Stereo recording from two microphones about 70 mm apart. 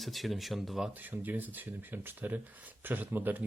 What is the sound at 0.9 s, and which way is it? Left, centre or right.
Speech, right.